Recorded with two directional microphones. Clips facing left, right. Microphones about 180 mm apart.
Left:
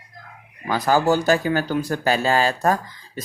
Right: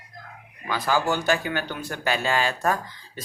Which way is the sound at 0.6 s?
40° left (ahead or behind).